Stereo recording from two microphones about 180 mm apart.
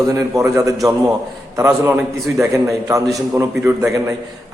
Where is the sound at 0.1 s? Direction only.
15° right (ahead or behind).